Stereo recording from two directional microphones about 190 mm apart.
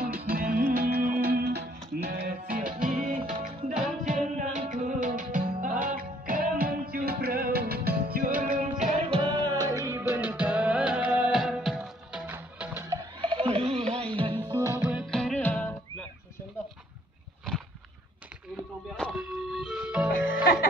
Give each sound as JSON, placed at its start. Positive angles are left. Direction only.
{"t": 0.0, "sound": "music", "side_deg": -50}
{"t": 13.2, "sound": "a sound", "side_deg": -30}
{"t": 14.1, "sound": "music", "side_deg": -25}
{"t": 18.9, "sound": "music", "side_deg": 0}